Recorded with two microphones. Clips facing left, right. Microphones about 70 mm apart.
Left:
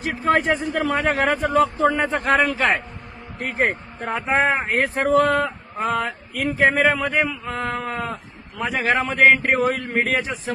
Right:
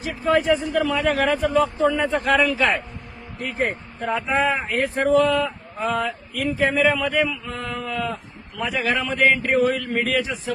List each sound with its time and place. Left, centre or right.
0.0 s speech: left